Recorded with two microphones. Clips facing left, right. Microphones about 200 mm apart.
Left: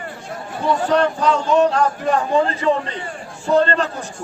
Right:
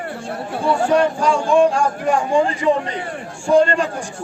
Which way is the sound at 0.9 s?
10° right (ahead or behind).